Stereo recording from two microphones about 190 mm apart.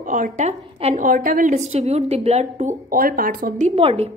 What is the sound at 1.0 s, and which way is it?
A woman's voice, 45° right (ahead or behind).